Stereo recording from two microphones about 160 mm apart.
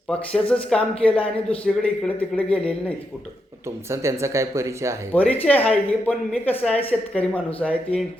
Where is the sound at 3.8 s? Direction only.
15° right (ahead or behind).